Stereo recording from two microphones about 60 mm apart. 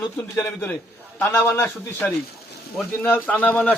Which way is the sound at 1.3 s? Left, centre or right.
Left.